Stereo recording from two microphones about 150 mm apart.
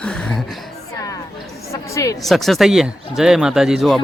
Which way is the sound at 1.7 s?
20° left (ahead or behind).